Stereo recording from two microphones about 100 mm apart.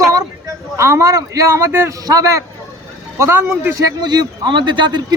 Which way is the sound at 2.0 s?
40° right (ahead or behind).